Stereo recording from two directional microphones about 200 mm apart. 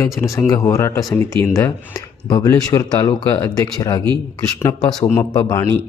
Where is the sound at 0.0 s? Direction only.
15° left (ahead or behind).